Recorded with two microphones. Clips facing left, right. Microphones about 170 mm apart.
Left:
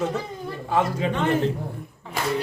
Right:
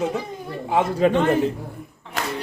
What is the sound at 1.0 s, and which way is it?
Speech, 50° right (ahead or behind).